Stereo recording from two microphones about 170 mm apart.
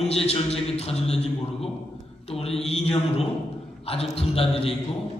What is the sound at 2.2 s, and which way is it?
Mantra, 35° left (ahead or behind).